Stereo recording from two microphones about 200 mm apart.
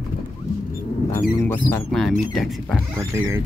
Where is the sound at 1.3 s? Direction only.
10° left (ahead or behind).